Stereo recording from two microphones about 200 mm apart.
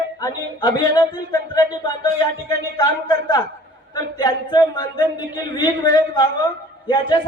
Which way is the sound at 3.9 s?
20° left (ahead or behind).